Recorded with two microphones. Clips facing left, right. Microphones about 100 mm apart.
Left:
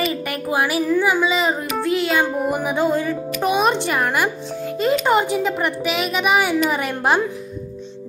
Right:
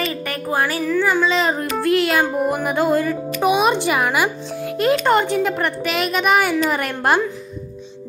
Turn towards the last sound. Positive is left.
turn(degrees=0)  # may be behind; listen again after turning